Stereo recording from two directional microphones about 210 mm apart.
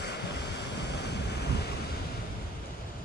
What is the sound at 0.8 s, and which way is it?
Waves, 55° left (ahead or behind).